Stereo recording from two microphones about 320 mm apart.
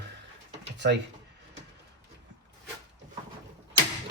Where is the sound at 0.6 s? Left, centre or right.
Right.